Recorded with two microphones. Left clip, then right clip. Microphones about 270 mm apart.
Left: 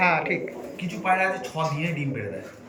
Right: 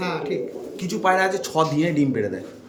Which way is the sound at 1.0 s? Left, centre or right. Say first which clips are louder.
Right 3 dB; right.